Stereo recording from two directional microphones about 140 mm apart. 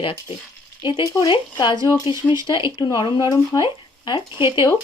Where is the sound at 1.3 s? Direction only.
30° left (ahead or behind).